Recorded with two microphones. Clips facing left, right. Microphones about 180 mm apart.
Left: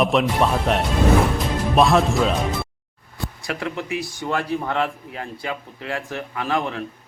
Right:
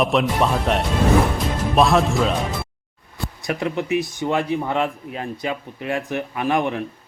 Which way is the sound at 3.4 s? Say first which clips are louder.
Right 5 dB; 20° right (ahead or behind).